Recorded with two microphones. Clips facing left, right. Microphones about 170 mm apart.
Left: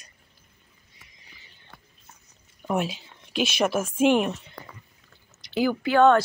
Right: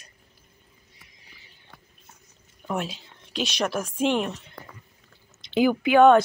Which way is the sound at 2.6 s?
5° left (ahead or behind).